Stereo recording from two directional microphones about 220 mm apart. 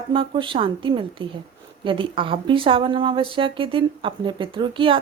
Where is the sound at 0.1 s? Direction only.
25° right (ahead or behind).